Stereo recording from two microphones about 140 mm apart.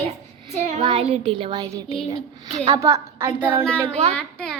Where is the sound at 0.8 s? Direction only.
45° right (ahead or behind); by 3.6 s 15° right (ahead or behind).